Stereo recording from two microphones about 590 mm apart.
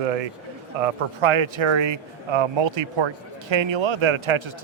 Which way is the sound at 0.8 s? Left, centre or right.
Right.